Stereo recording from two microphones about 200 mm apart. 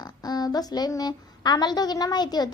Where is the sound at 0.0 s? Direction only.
20° left (ahead or behind).